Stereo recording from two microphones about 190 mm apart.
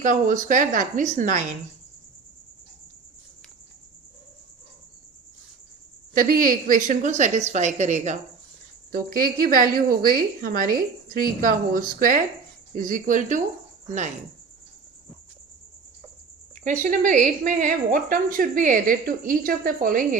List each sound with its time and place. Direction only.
0.0 s a woman's voice: 40° right (ahead or behind)
6.1 s a woman's voice: 50° right (ahead or behind)
9.1 s a woman's voice: 50° right (ahead or behind)
16.6 s a woman's voice: 45° right (ahead or behind)